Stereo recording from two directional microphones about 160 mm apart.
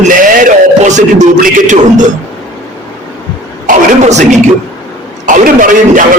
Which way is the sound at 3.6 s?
50° right (ahead or behind).